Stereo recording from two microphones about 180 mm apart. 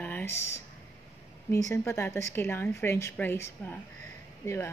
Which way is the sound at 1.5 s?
15° left (ahead or behind).